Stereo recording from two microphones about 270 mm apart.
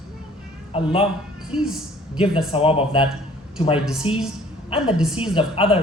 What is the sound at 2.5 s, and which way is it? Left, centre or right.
Speech, left.